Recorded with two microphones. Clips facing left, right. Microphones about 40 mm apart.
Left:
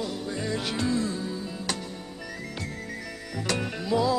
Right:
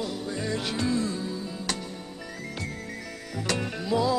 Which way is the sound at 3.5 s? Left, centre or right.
Centre.